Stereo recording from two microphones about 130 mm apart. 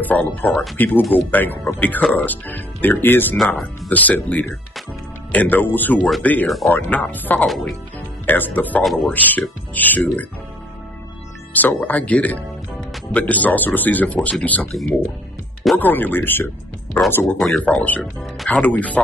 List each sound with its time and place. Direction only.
0.0 s speech: 10° left (ahead or behind)
7.4 s a man's voice: centre (ahead or behind)
8.3 s speech: 15° left (ahead or behind)
8.8 s a man's voice: centre (ahead or behind)
9.1 s speech: 15° left (ahead or behind)
11.6 s speech: 10° left (ahead or behind)
14.7 s a man's voice: centre (ahead or behind)
15.8 s speech: 15° left (ahead or behind)
17.4 s speech: 5° left (ahead or behind)